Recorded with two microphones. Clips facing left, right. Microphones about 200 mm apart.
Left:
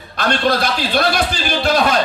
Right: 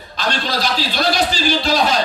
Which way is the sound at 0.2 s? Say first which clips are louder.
Left 4 dB; 60° left (ahead or behind).